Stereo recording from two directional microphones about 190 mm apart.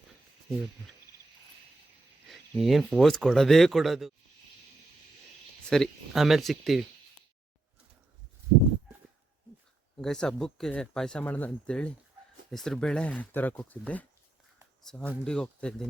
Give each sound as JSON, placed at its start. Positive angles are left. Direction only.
{"t": 2.3, "sound": "speech", "side_deg": 0}
{"t": 5.6, "sound": "speech", "side_deg": 5}
{"t": 10.0, "sound": "speech", "side_deg": 5}